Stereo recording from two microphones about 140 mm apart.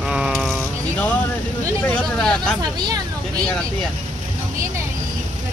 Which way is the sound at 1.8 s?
5° left (ahead or behind).